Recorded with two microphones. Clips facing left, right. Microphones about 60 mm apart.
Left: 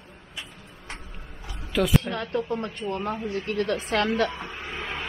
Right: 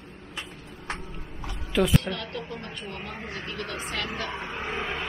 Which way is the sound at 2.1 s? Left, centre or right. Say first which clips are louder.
Left 6 dB; left.